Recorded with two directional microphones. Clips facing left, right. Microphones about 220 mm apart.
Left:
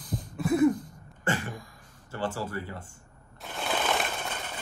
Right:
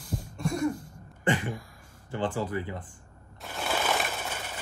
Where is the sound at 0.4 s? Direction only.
5° left (ahead or behind).